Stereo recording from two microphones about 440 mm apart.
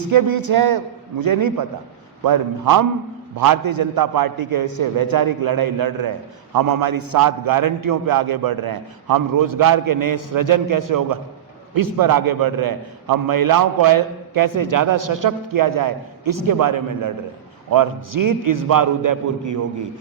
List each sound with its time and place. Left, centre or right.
0.1 s a man's voice: right